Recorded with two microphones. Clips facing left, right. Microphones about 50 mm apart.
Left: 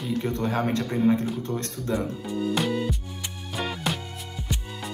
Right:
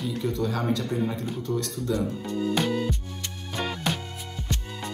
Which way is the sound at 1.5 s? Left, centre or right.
Left.